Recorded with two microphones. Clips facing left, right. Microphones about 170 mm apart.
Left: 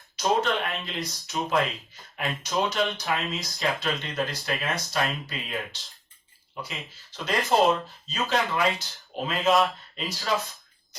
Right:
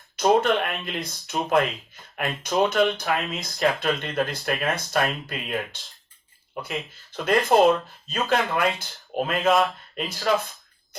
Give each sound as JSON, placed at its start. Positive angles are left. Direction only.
{"t": 0.2, "sound": "speech", "side_deg": -55}